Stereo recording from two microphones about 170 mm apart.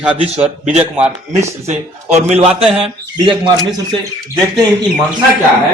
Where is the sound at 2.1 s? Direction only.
40° right (ahead or behind).